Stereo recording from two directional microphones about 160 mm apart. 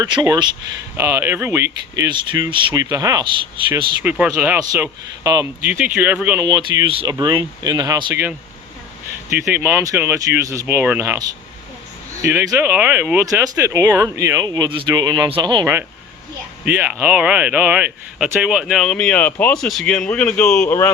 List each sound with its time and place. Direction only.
0.0 s speech: 25° right (ahead or behind)
0.9 s speech: 15° right (ahead or behind)
2.0 s speech: 25° right (ahead or behind)
3.7 s speech: 10° right (ahead or behind)
5.7 s speech: 10° right (ahead or behind)
6.4 s speech: 25° right (ahead or behind)
9.5 s speech: 15° right (ahead or behind)
16.7 s speech: 10° right (ahead or behind); by 20.9 s 15° left (ahead or behind)